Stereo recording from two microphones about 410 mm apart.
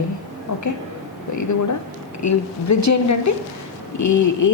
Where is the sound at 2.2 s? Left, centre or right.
Left.